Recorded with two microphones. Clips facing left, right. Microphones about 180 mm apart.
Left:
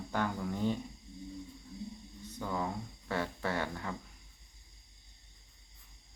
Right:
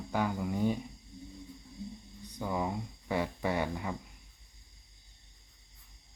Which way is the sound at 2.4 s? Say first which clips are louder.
Right 3 dB; 15° right (ahead or behind).